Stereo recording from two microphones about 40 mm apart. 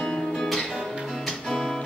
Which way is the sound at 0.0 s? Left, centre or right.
Centre.